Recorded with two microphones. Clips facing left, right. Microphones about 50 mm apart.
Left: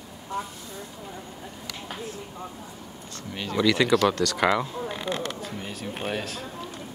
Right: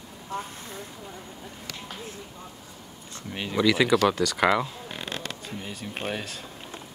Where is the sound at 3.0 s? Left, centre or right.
Centre.